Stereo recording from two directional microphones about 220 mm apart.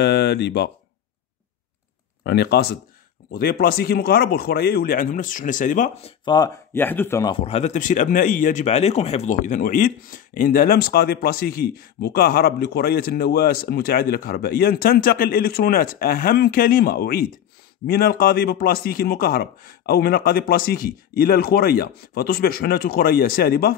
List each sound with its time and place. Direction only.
0.0 s speech: 50° left (ahead or behind)
2.2 s speech: 45° left (ahead or behind)
6.2 s speech: 20° left (ahead or behind); by 23.7 s 45° left (ahead or behind)